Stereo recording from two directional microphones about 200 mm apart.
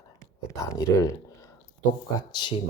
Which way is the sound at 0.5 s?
15° left (ahead or behind).